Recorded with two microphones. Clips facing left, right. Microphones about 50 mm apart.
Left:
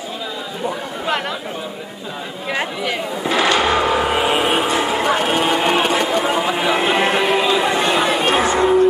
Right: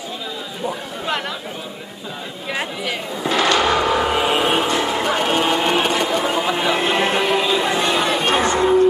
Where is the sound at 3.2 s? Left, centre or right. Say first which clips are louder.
Even; left.